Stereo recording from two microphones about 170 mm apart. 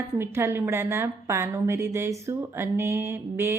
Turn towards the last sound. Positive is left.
turn(degrees=-15)  # may be behind; listen again after turning